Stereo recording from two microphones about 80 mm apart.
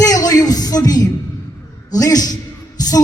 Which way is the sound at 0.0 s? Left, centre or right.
Left.